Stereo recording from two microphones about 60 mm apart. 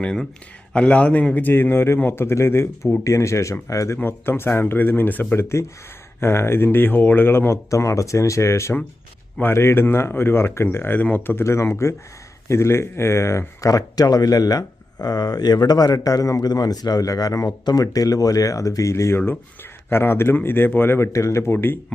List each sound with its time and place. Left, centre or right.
0.0 s a man's voice: centre; by 2.9 s left
3.0 s speech: left
3.9 s speech: left
5.3 s speech: left
7.7 s speech: left
11.3 s speech: left
13.6 s a man's voice: left
21.1 s speech: left
21.4 s speech: left